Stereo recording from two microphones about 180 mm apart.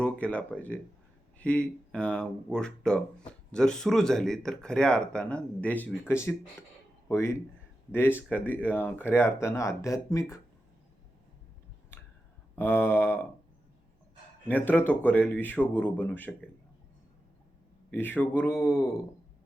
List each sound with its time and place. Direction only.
0.0 s speech: 5° left (ahead or behind)
12.5 s speech: 10° left (ahead or behind)
14.4 s speech: 10° left (ahead or behind)
17.9 s speech: 10° left (ahead or behind)